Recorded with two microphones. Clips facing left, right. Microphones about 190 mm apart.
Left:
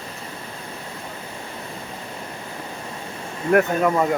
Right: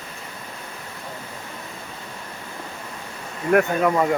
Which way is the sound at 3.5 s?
Centre (ahead or behind).